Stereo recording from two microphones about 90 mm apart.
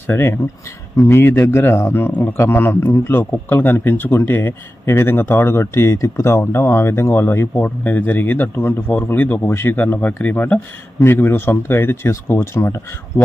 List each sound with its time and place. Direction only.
0.1 s a man's voice: 25° left (ahead or behind)